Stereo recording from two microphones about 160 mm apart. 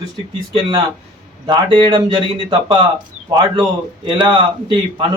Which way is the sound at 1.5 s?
30° right (ahead or behind).